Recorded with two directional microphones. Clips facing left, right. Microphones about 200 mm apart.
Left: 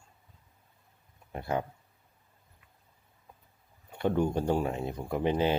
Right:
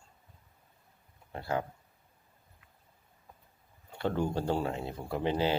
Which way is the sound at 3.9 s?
15° left (ahead or behind).